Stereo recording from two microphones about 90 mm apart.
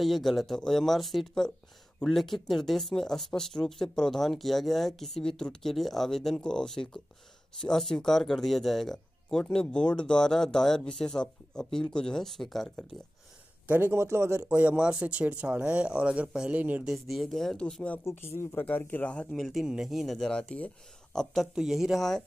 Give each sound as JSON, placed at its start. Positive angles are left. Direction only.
{"t": 0.0, "sound": "speech", "side_deg": 0}
{"t": 13.7, "sound": "a man's voice", "side_deg": -25}
{"t": 14.5, "sound": "speech", "side_deg": -15}
{"t": 16.8, "sound": "speech", "side_deg": 0}
{"t": 18.0, "sound": "speech", "side_deg": 30}
{"t": 19.3, "sound": "speech", "side_deg": 0}